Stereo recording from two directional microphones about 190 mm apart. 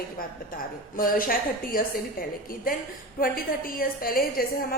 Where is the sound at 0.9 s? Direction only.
50° left (ahead or behind).